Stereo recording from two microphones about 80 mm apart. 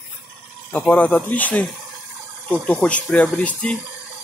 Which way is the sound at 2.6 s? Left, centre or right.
Centre.